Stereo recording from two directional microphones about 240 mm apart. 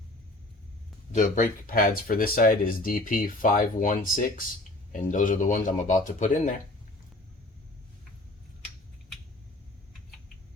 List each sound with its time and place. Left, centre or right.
1.1 s speech: left